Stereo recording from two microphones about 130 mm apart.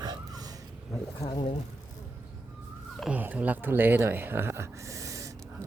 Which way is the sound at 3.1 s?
10° right (ahead or behind).